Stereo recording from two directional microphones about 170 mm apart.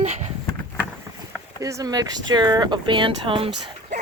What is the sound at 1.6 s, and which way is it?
Speech, 20° right (ahead or behind).